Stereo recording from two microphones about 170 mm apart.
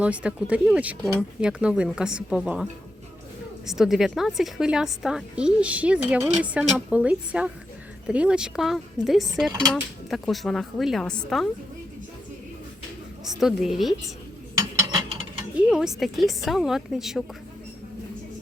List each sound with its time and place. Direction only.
0.0 s a woman's voice: 5° right (ahead or behind)
3.7 s a woman's voice: centre (ahead or behind)
9.5 s cutlery: 20° right (ahead or behind)
10.1 s a woman's voice: centre (ahead or behind)
13.4 s a woman's voice: centre (ahead or behind)
15.7 s a woman's voice: 5° right (ahead or behind)